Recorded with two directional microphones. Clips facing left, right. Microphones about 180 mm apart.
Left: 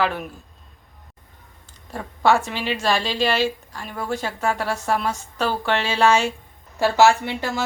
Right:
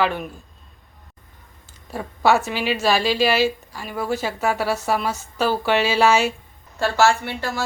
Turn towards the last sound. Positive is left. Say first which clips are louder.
# left 1 dB
turn(degrees=20)  # may be behind; listen again after turning